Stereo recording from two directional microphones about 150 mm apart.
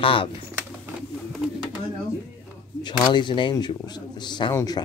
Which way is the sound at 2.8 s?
30° left (ahead or behind).